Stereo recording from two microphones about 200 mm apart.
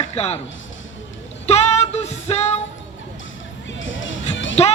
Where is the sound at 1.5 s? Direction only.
30° left (ahead or behind).